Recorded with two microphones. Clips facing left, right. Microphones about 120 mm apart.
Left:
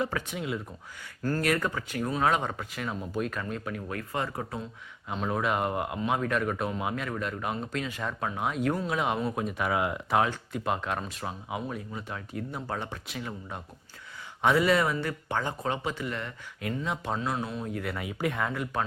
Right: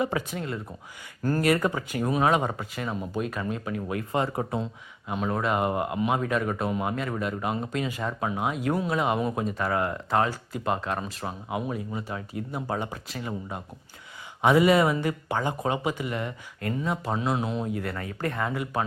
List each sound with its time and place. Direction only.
0.0 s speech: 5° right (ahead or behind)
0.3 s speech: 5° left (ahead or behind)
1.4 s speech: 10° right (ahead or behind)
3.9 s speech: 25° right (ahead or behind)
5.0 s speech: 5° right (ahead or behind)
16.6 s speech: centre (ahead or behind)
17.2 s speech: 20° right (ahead or behind)
17.7 s speech: 5° right (ahead or behind)
17.9 s speech: 10° left (ahead or behind); by 18.8 s 5° right (ahead or behind)